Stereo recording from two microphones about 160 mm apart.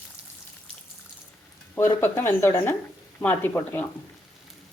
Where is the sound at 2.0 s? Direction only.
15° left (ahead or behind).